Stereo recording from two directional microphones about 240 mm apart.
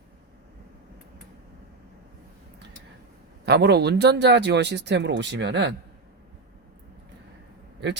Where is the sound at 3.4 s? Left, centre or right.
Right.